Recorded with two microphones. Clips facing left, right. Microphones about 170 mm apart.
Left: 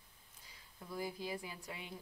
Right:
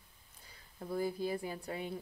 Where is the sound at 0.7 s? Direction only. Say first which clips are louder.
Right 7 dB; 50° right (ahead or behind).